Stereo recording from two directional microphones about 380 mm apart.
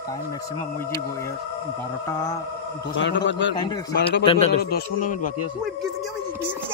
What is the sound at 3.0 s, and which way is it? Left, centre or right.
Speech, left.